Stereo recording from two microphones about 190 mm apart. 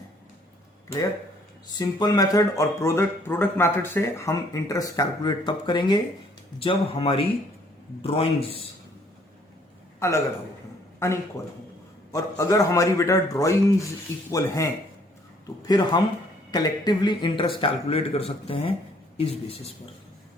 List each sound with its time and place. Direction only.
1.6 s speech: 20° left (ahead or behind)
10.0 s speech: 15° left (ahead or behind); by 19.7 s 30° left (ahead or behind)